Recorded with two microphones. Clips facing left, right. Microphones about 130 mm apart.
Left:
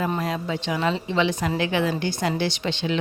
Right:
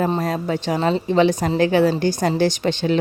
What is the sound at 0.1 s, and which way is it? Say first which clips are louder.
A woman's voice: right 5 dB; 40° right (ahead or behind).